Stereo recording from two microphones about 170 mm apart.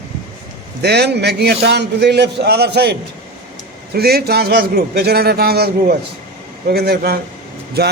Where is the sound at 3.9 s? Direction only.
65° right (ahead or behind).